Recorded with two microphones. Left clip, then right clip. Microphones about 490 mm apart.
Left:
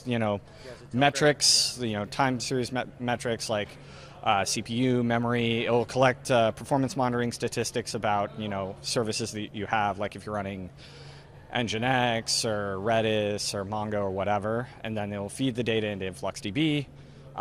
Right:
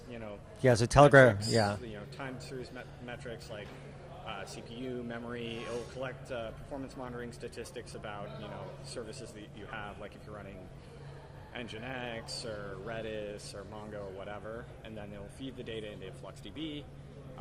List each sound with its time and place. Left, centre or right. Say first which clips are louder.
0.1 s speech: left 17 dB; left
1.4 s speech: left 7 dB; left
11.5 s speech: left 15 dB; left